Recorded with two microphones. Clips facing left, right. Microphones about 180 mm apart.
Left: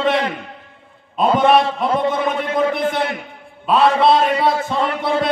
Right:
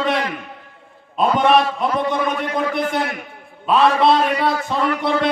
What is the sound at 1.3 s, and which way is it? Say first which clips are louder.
A man's voice: left 2 dB; 25° left (ahead or behind).